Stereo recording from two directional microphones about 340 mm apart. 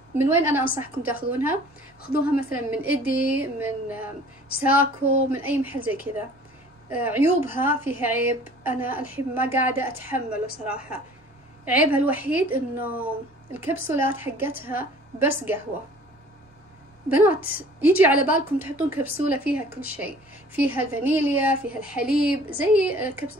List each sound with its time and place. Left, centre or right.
0.2 s a woman's voice: centre
2.0 s a woman's voice: left
2.7 s a woman's voice: centre
17.1 s a woman's voice: centre